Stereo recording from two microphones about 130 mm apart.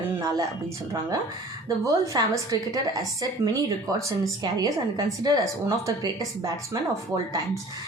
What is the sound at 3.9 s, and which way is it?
A woman's voice, 25° right (ahead or behind).